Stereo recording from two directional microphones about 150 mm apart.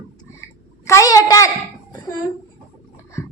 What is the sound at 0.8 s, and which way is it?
A child's voice, 20° left (ahead or behind).